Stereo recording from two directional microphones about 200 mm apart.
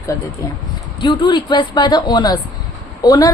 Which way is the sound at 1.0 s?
25° left (ahead or behind).